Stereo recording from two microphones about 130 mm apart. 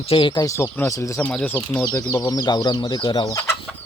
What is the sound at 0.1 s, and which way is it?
Speech, 40° left (ahead or behind).